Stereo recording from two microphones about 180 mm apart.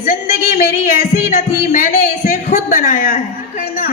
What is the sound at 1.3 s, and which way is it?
A woman's voice, 45° left (ahead or behind).